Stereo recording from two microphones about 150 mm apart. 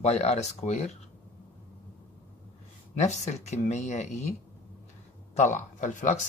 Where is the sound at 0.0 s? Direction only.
45° left (ahead or behind).